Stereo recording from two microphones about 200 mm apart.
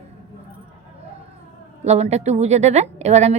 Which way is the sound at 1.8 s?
35° right (ahead or behind).